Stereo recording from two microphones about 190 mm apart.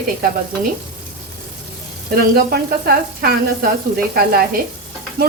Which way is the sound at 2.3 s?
55° right (ahead or behind).